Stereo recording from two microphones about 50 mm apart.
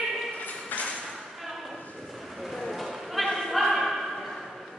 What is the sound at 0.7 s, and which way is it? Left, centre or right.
Ping, left.